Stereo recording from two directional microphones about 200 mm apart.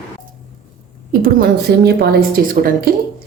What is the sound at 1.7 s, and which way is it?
Speech, 50° right (ahead or behind).